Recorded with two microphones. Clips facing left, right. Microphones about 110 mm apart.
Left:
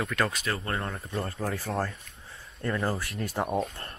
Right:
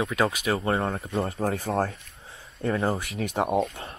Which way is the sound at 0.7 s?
25° right (ahead or behind).